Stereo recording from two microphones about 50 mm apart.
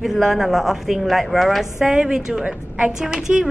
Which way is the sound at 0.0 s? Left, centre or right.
Centre.